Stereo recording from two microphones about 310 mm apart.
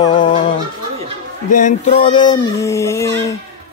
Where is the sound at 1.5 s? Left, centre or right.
Left.